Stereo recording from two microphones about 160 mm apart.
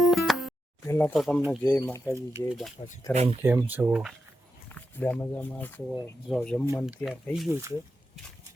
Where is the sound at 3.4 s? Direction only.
10° right (ahead or behind).